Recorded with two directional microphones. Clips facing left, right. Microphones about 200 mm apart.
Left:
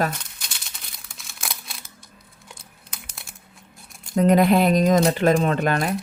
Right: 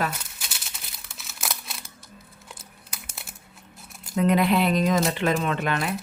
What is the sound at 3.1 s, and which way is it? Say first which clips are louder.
Crumpling: right 1 dB; centre (ahead or behind).